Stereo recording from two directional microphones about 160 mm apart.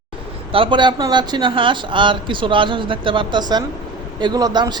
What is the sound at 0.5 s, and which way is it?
A man's voice, 30° right (ahead or behind).